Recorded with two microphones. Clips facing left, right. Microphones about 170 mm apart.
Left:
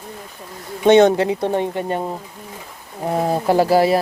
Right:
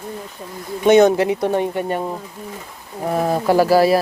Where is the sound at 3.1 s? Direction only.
20° left (ahead or behind).